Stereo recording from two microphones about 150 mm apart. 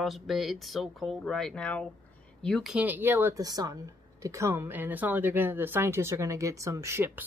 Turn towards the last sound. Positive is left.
turn(degrees=-15)  # may be behind; listen again after turning